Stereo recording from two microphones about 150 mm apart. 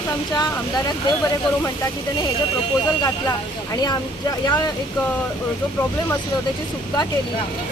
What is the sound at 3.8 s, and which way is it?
Speech, 25° left (ahead or behind).